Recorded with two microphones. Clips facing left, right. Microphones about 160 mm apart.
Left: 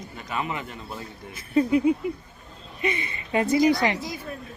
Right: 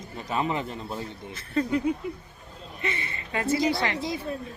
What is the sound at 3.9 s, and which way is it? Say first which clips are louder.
Speech: right 3 dB; 25° right (ahead or behind).